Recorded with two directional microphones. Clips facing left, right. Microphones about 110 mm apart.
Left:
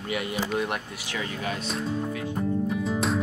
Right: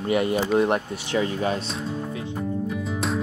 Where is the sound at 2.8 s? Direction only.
Centre (ahead or behind).